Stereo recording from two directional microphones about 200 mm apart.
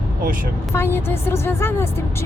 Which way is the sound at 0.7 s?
10° left (ahead or behind).